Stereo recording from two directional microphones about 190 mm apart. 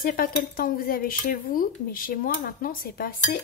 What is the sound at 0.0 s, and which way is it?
Speech, 50° left (ahead or behind).